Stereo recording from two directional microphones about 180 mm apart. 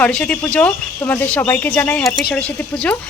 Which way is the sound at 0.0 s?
5° left (ahead or behind).